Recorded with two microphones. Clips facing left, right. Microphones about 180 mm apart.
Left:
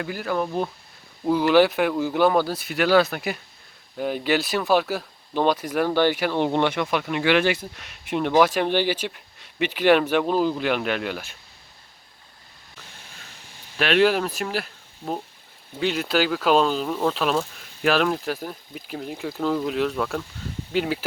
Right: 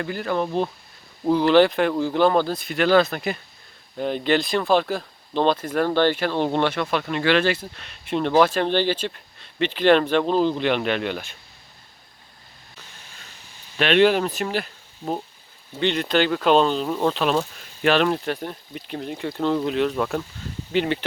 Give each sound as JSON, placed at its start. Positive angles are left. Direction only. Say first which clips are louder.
{"t": 0.0, "sound": "speech", "louder": "right 1 dB", "side_deg": 5}
{"t": 13.7, "sound": "speech", "louder": "right 2 dB", "side_deg": 5}